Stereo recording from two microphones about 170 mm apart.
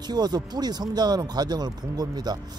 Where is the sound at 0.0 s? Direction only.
25° right (ahead or behind).